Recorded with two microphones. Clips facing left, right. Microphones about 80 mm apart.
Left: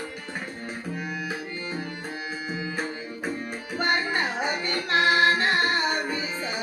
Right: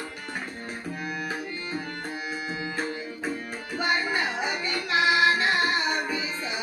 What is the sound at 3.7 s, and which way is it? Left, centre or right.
Music, left.